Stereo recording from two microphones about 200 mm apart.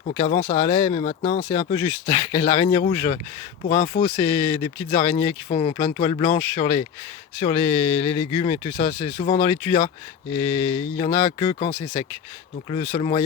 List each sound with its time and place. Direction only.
0.1 s speech: 30° left (ahead or behind)
4.2 s speech: 20° left (ahead or behind)